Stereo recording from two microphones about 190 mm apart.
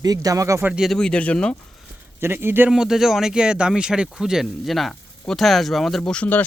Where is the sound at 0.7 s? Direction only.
Centre (ahead or behind).